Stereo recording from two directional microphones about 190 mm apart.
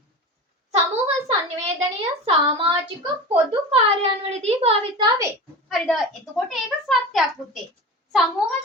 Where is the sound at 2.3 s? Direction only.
30° right (ahead or behind).